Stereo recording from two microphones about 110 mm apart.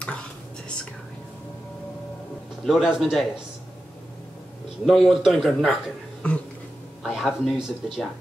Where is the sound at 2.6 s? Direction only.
Centre (ahead or behind).